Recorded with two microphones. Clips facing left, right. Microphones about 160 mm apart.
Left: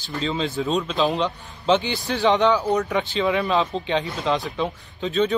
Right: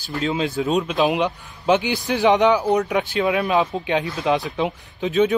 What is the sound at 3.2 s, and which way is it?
Speech, 5° right (ahead or behind).